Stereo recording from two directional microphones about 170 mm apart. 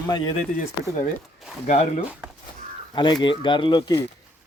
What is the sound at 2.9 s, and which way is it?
Speech, 25° left (ahead or behind).